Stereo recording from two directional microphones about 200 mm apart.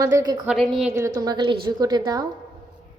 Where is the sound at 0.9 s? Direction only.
15° right (ahead or behind).